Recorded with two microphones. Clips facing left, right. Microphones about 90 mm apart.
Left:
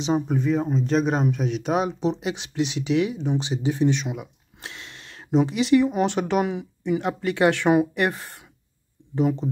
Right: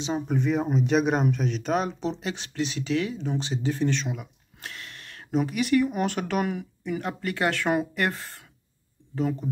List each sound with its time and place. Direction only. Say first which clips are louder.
0.3 s speech: left 2 dB; 5° right (ahead or behind); by 9.5 s 20° left (ahead or behind)